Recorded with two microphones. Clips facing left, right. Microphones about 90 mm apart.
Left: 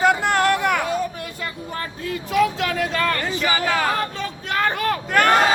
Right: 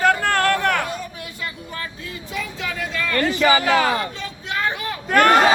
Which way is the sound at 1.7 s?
40° left (ahead or behind).